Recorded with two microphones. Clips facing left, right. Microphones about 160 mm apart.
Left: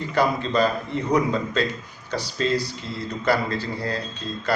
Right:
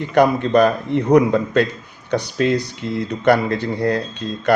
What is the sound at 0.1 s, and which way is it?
A man's voice, 65° right (ahead or behind).